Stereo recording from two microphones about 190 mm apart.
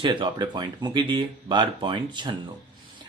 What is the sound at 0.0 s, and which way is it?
Speech, 25° right (ahead or behind).